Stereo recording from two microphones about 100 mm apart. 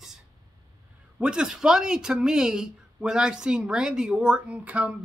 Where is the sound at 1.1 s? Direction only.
10° right (ahead or behind).